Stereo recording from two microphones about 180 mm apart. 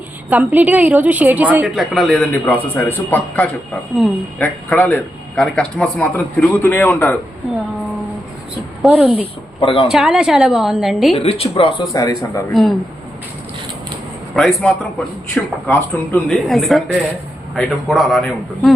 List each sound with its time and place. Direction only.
0.3 s a woman's voice: 10° right (ahead or behind); by 7.2 s 5° left (ahead or behind)
8.8 s a woman's voice: 5° right (ahead or behind)
9.6 s speech: 30° left (ahead or behind)
9.9 s speech: 5° right (ahead or behind)
11.2 s speech: 30° left (ahead or behind)
11.9 s a man's voice: 20° left (ahead or behind)
14.3 s speech: centre (ahead or behind)